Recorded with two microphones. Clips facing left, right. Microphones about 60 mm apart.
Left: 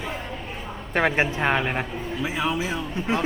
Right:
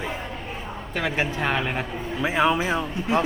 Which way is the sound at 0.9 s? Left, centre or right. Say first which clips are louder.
Left 4 dB; left.